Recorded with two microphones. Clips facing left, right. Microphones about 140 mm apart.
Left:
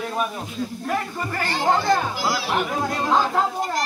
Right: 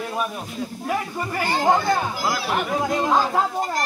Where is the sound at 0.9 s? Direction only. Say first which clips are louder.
Right 2 dB; 10° right (ahead or behind).